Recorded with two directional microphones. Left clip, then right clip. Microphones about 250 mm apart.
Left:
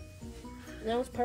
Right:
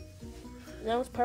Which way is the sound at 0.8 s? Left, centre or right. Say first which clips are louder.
Right 1 dB; right.